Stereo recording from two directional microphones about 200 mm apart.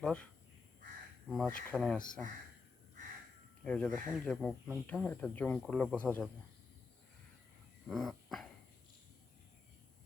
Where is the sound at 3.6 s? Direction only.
5° left (ahead or behind).